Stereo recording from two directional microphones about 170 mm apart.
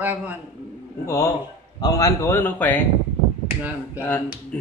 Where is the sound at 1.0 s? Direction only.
20° left (ahead or behind).